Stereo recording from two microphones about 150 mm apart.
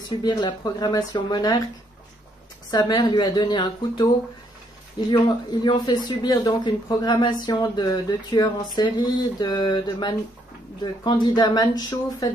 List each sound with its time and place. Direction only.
0.1 s speech: 30° left (ahead or behind)
2.7 s speech: 25° left (ahead or behind)
5.1 s speech: 30° left (ahead or behind)